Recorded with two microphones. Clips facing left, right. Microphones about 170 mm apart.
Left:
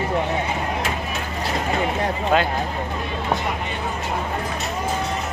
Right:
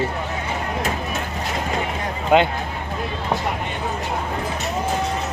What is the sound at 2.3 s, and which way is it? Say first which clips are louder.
Speech: right 5 dB; 15° right (ahead or behind).